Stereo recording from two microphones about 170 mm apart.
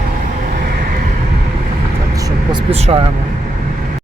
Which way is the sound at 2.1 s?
25° right (ahead or behind).